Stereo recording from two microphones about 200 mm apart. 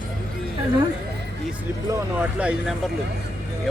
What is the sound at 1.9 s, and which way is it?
Speech, 10° right (ahead or behind).